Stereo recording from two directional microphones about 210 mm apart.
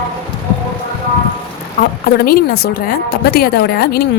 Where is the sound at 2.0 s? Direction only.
45° left (ahead or behind).